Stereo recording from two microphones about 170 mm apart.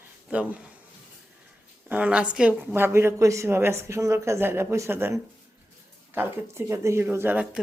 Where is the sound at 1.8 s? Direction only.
10° right (ahead or behind).